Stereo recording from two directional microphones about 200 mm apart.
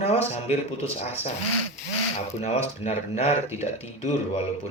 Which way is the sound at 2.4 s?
35° left (ahead or behind).